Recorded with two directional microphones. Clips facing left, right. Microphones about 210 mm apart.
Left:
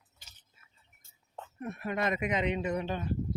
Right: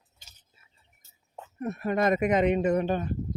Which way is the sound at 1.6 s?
40° right (ahead or behind).